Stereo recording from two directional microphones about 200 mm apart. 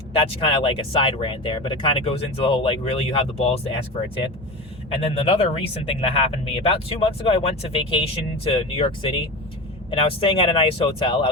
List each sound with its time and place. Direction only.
0.1 s speech: 25° left (ahead or behind)